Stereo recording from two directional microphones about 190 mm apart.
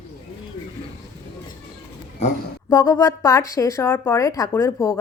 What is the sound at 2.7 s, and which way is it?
Speech, 20° left (ahead or behind).